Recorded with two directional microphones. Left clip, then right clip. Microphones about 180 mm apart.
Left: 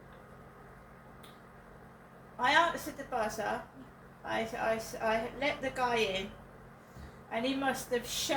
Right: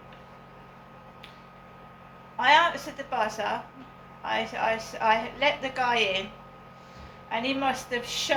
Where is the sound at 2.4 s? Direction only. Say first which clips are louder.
Right 7 dB; 15° left (ahead or behind).